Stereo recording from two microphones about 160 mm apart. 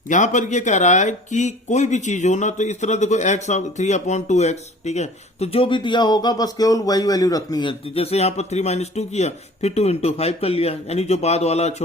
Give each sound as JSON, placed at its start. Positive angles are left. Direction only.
{"t": 0.1, "sound": "speech", "side_deg": 50}